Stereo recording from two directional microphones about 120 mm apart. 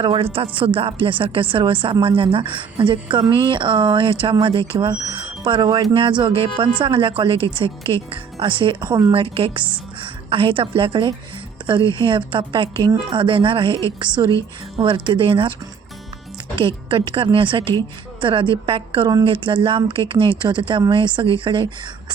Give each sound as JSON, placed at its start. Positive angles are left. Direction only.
{"t": 0.0, "sound": "speech", "side_deg": -50}
{"t": 5.9, "sound": "speech", "side_deg": -45}
{"t": 9.1, "sound": "speech", "side_deg": -50}
{"t": 14.8, "sound": "speech", "side_deg": -45}
{"t": 16.6, "sound": "speech", "side_deg": -45}